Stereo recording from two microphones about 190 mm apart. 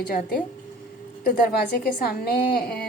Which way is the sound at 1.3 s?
50° left (ahead or behind).